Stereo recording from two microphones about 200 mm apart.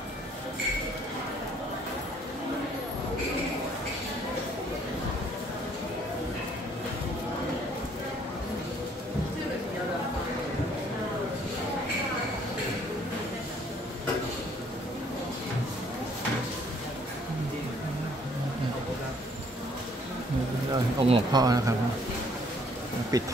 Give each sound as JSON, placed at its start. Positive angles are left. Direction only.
{"t": 20.7, "sound": "speech", "side_deg": -20}
{"t": 23.1, "sound": "speech", "side_deg": -20}